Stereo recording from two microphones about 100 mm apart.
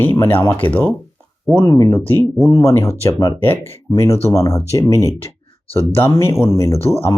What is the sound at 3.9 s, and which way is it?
Speech, 30° left (ahead or behind).